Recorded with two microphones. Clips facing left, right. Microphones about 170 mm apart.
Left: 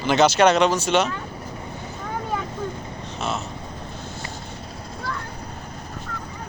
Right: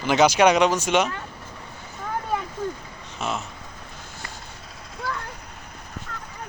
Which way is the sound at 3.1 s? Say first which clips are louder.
Left 1 dB; 10° right (ahead or behind).